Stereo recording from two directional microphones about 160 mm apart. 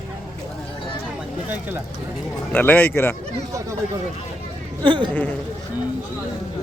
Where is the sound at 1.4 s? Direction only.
10° right (ahead or behind).